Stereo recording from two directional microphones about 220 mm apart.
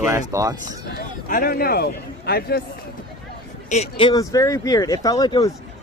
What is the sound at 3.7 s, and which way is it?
Speech, 25° left (ahead or behind).